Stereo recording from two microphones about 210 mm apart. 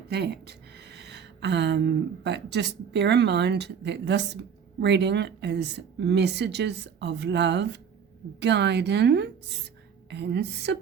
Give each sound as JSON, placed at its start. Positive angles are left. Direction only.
{"t": 0.1, "sound": "a woman's voice", "side_deg": -50}